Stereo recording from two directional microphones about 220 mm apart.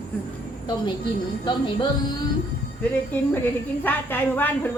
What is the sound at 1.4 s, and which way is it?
Speech, 20° left (ahead or behind).